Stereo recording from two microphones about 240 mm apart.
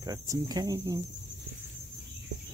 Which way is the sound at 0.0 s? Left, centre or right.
Centre.